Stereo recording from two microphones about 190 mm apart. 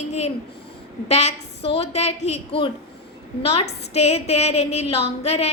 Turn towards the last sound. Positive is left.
turn(degrees=35)  # may be behind; listen again after turning